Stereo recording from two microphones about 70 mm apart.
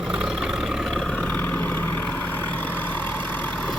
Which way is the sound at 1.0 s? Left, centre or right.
Centre.